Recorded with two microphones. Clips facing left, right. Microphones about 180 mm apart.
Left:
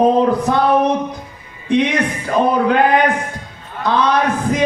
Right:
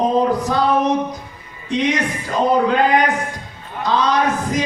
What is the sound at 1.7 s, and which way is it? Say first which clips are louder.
Speech: left 3 dB; 60° left (ahead or behind).